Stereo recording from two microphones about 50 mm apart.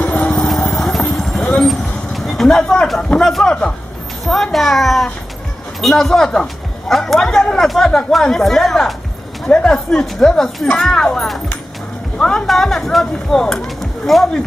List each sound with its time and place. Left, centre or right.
0.2 s vehicle: centre
3.2 s a child's voice: centre